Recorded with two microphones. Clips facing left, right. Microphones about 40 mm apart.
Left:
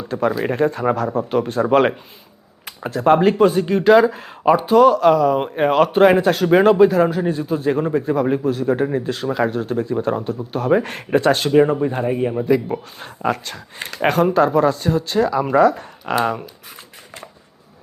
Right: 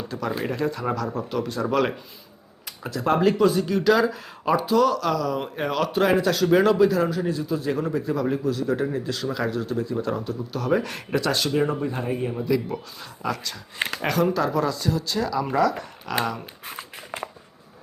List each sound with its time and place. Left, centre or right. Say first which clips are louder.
0.1 s speech: left 9 dB; left
2.6 s speech: left 8 dB; left
12.0 s a man's voice: left 7 dB; left
13.0 s speech: left 8 dB; left
16.7 s a sound: right 4 dB; right